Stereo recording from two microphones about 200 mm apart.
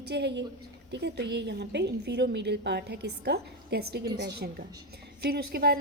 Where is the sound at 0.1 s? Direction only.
60° right (ahead or behind).